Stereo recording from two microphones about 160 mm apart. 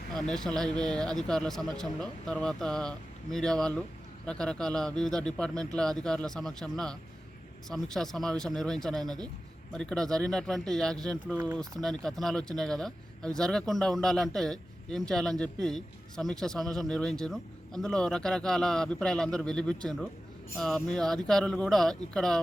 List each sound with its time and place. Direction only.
0.1 s a man's voice: 5° left (ahead or behind)